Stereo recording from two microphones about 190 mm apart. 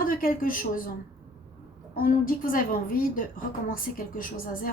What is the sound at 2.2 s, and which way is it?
A woman's voice, 45° left (ahead or behind).